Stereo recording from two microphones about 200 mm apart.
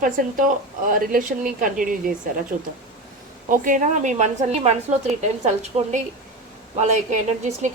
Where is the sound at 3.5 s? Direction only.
40° right (ahead or behind).